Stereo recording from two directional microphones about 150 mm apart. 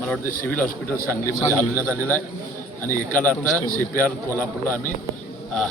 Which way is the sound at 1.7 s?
15° right (ahead or behind).